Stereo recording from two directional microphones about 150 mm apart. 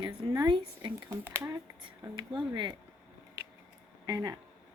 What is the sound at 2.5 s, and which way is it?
Speech, 30° right (ahead or behind).